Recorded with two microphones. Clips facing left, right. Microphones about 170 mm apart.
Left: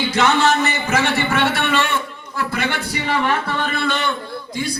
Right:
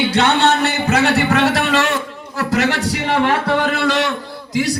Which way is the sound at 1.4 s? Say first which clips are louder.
Right 3 dB; 90° right.